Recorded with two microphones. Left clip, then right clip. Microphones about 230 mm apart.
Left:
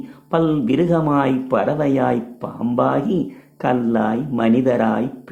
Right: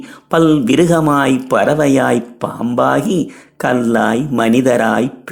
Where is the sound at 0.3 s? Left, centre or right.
Right.